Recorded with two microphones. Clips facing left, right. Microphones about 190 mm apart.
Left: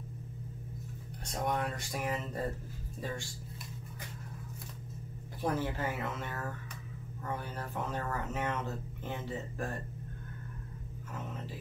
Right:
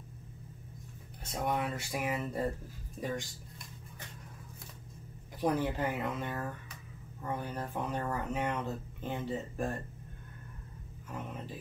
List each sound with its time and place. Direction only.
1.4 s speech: 5° right (ahead or behind)
5.4 s speech: 15° right (ahead or behind)